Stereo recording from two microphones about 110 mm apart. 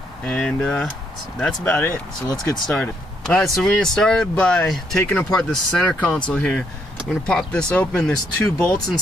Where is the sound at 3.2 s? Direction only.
5° left (ahead or behind).